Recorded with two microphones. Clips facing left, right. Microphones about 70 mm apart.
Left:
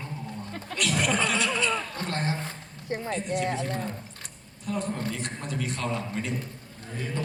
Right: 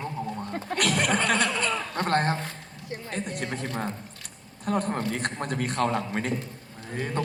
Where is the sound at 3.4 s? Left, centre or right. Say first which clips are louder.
Left 1 dB; right.